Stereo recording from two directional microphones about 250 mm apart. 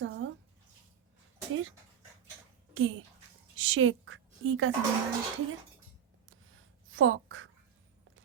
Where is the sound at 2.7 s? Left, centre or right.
Right.